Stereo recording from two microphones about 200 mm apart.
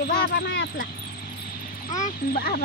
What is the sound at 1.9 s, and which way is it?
Speech, 40° left (ahead or behind).